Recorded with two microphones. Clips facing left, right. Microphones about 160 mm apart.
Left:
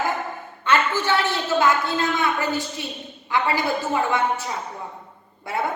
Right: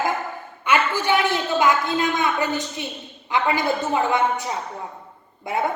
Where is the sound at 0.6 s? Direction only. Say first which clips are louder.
Even; 15° right (ahead or behind).